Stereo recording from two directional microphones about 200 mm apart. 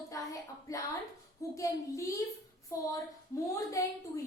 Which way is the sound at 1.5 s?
15° left (ahead or behind).